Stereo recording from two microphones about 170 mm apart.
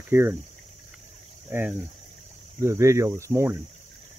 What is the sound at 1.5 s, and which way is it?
Speech, 10° right (ahead or behind).